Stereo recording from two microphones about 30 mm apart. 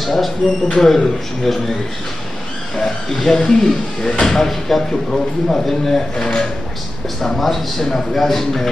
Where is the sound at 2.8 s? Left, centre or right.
Centre.